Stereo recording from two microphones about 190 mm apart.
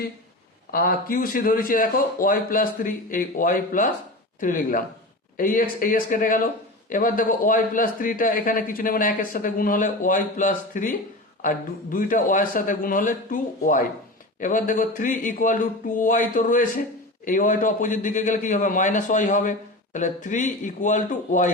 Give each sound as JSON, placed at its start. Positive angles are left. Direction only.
{"t": 0.7, "sound": "a man's voice", "side_deg": 50}